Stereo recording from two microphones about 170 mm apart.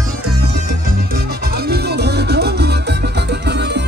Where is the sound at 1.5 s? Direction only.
70° right (ahead or behind).